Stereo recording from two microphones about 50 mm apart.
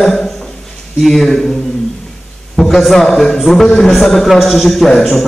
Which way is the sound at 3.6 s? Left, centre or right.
Centre.